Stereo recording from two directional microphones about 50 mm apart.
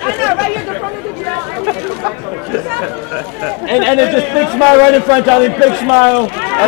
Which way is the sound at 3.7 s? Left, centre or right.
Centre.